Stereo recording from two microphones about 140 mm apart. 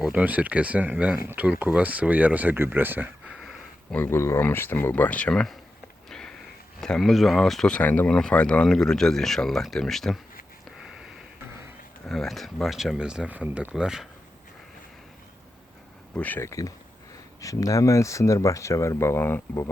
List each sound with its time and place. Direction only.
0.0 s speech: 10° right (ahead or behind)
3.9 s speech: 15° left (ahead or behind)
6.1 s sniff: 5° left (ahead or behind)
6.8 s speech: centre (ahead or behind)
12.0 s speech: centre (ahead or behind)
16.1 s speech: 10° left (ahead or behind)